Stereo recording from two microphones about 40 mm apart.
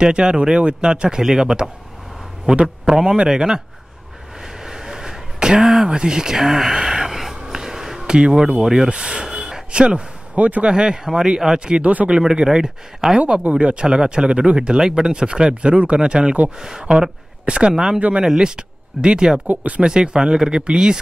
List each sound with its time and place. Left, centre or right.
0.0 s speech: right
2.5 s speech: right
2.9 s speech: centre
4.6 s a sound: centre
8.6 s speech: right
10.3 s speech: right
10.7 s speech: right
11.8 s speech: right
12.2 s speech: centre
13.4 s speech: right
14.8 s speech: centre
18.2 s speech: centre
19.4 s speech: right
19.8 s speech: right